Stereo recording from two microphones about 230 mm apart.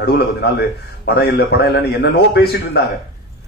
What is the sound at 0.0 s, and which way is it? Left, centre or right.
A man's voice, left.